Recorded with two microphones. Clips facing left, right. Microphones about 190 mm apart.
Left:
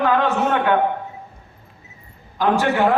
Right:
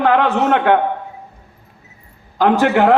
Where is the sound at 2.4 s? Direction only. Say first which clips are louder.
Right 4 dB; 60° right (ahead or behind).